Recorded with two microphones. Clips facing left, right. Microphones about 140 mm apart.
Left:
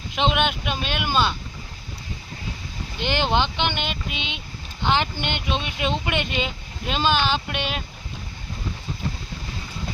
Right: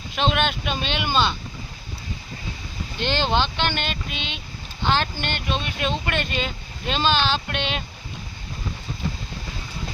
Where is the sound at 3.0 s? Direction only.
15° left (ahead or behind).